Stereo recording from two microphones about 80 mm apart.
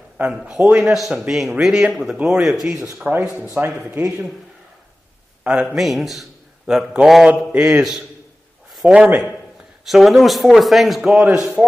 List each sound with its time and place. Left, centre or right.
0.3 s speech: centre
3.1 s a man's voice: centre
5.5 s a man's voice: centre
9.8 s speech: centre